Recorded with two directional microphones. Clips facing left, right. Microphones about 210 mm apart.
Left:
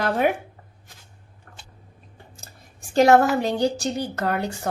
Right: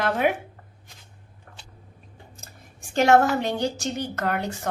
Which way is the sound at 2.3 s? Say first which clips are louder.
Even; 35° left (ahead or behind).